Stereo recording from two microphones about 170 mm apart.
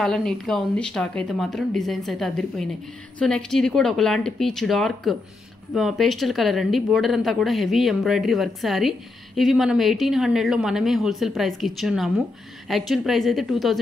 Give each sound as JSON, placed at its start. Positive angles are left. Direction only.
{"t": 0.0, "sound": "a woman's voice", "side_deg": 5}